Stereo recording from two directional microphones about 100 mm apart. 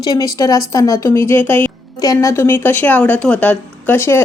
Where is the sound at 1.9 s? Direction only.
35° left (ahead or behind).